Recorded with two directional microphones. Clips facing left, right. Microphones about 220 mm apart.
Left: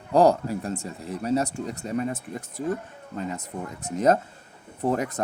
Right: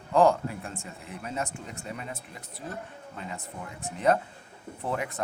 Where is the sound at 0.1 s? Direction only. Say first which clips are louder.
Left 3 dB; 40° left (ahead or behind).